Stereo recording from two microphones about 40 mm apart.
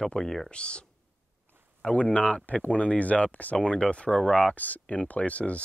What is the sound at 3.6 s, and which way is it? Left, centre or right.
Speech, left.